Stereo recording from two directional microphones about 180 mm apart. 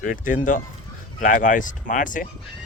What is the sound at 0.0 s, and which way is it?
Speech, 45° left (ahead or behind).